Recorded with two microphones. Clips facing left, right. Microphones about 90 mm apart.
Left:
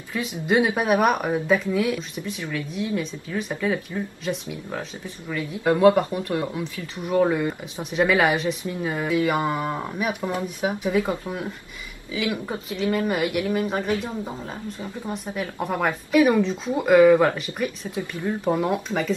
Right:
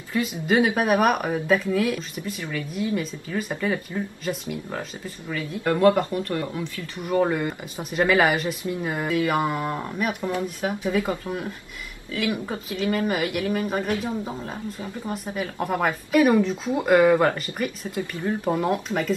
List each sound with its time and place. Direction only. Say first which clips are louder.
0.1 s speech: even; centre (ahead or behind); by 7.2 s 15° left (ahead or behind)
7.2 s speech: left 2 dB; centre (ahead or behind)
12.6 s speech: left 1 dB; centre (ahead or behind)